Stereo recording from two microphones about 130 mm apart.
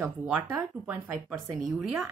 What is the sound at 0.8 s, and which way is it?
Speech, 10° right (ahead or behind).